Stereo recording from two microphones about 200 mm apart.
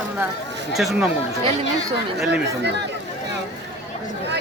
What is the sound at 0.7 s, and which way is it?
Speech, centre (ahead or behind).